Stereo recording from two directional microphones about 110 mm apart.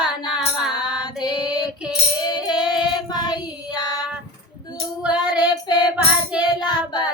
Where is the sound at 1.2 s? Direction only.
35° left (ahead or behind).